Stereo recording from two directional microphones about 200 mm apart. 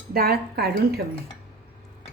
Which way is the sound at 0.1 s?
50° right (ahead or behind).